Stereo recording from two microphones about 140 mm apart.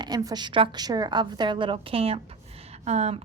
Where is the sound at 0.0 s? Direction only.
30° right (ahead or behind).